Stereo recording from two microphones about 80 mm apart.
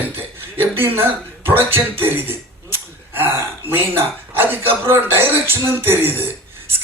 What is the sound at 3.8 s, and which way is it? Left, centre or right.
Speech, right.